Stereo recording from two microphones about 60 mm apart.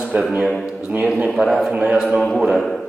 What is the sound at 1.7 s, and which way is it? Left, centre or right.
Speech, right.